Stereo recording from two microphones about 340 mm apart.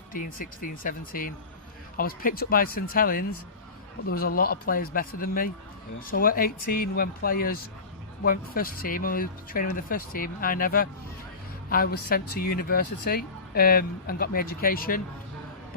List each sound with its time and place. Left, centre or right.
0.1 s speech: left